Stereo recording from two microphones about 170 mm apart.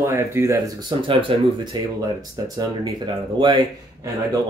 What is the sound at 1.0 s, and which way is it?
Speech, 35° right (ahead or behind).